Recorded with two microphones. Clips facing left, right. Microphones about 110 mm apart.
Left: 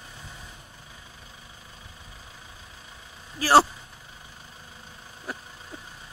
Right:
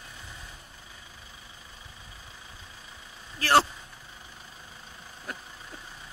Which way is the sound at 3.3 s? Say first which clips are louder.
Left 4 dB; 10° left (ahead or behind).